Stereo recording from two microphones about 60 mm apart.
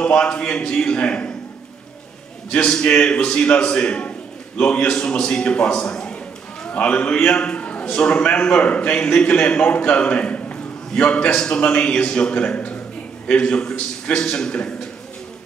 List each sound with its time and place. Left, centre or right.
0.0 s a man's voice: centre
2.5 s a man's voice: centre